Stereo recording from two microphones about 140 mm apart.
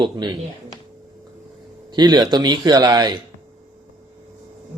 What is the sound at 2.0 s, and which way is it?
Speech, 30° right (ahead or behind).